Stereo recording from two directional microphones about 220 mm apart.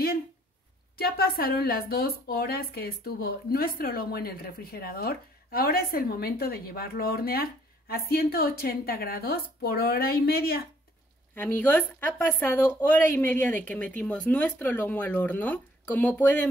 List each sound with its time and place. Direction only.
0.9 s speech: 45° left (ahead or behind)
11.3 s speech: 10° left (ahead or behind)